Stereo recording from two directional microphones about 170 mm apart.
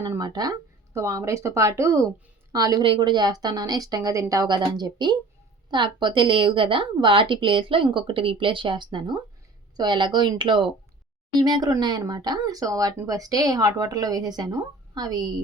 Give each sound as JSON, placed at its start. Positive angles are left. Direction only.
{"t": 0.0, "sound": "speech", "side_deg": -20}